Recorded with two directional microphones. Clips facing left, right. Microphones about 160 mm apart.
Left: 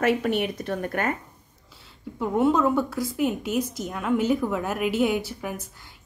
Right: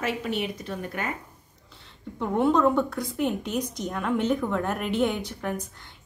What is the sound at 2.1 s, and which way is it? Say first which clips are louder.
A woman's voice: left 1 dB; 5° left (ahead or behind).